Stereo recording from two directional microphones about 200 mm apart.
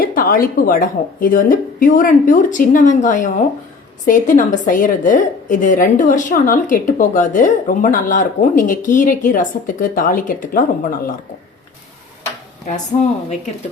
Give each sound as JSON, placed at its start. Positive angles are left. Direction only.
{"t": 0.0, "sound": "a woman's voice", "side_deg": 45}
{"t": 12.9, "sound": "a woman's voice", "side_deg": 30}